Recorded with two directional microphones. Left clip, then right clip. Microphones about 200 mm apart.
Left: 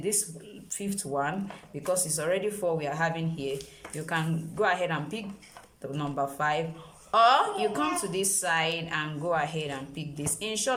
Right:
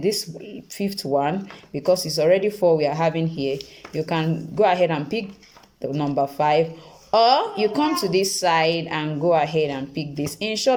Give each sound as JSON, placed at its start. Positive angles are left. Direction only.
{"t": 0.8, "sound": "a woman's voice", "side_deg": -25}